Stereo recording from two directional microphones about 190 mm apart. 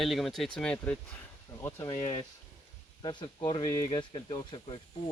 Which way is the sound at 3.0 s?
25° left (ahead or behind).